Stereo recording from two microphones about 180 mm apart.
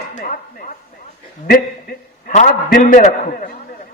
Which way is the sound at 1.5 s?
50° left (ahead or behind).